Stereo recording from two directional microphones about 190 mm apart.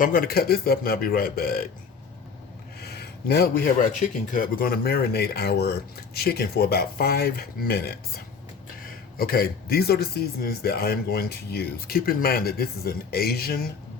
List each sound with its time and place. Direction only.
0.0 s speech: 45° left (ahead or behind)
2.8 s speech: 55° left (ahead or behind)